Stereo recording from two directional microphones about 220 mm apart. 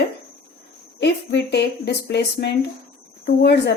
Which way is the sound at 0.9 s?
50° left (ahead or behind).